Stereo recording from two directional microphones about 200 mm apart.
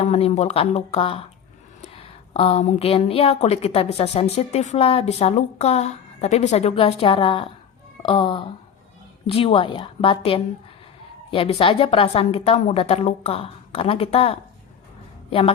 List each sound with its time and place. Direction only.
0.0 s a woman's voice: 35° left (ahead or behind)